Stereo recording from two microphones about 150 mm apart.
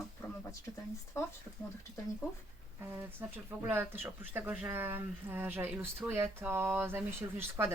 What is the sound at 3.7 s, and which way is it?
Speech, 15° right (ahead or behind).